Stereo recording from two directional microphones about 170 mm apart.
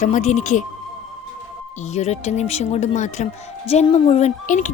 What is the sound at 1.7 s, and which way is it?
Speech, 40° left (ahead or behind).